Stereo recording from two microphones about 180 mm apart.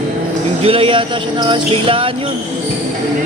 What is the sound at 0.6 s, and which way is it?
Music, 30° right (ahead or behind).